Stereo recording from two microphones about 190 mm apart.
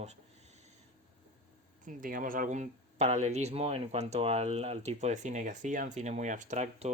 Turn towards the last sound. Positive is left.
turn(degrees=-40)  # may be behind; listen again after turning